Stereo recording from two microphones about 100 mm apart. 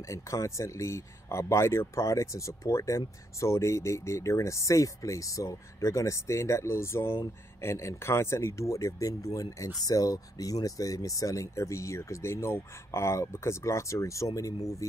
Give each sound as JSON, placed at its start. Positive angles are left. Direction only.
{"t": 0.0, "sound": "speech", "side_deg": 30}